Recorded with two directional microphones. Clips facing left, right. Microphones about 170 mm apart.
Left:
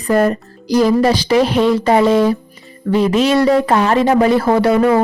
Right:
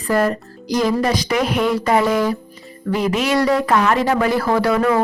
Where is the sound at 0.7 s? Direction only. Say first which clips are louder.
Left 5 dB; 35° left (ahead or behind).